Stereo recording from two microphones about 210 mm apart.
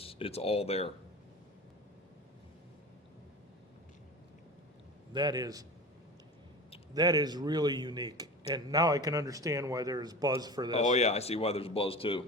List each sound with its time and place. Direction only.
0.0 s speech: 25° left (ahead or behind)
5.1 s a man's voice: 20° right (ahead or behind)
6.9 s speech: 20° right (ahead or behind)
10.8 s speech: 30° left (ahead or behind)